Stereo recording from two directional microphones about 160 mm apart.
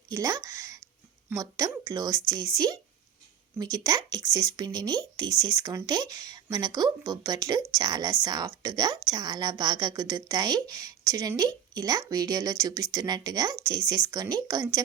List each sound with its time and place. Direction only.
0.1 s a woman's voice: 20° right (ahead or behind)
3.6 s a woman's voice: 20° right (ahead or behind)